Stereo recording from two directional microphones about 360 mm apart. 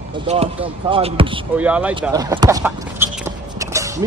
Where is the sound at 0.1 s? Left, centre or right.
Centre.